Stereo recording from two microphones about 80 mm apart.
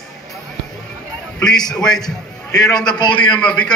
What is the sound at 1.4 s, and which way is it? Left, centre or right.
Speech, centre.